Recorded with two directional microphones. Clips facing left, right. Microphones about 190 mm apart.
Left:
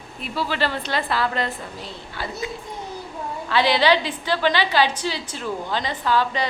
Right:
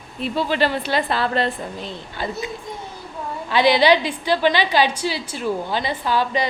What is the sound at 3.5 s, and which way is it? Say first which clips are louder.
Speech: right 3 dB; 15° right (ahead or behind).